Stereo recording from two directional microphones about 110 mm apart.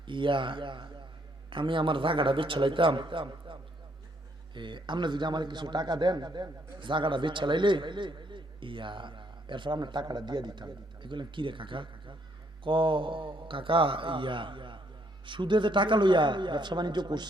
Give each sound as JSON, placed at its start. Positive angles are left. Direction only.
{"t": 0.1, "sound": "a man's voice", "side_deg": -50}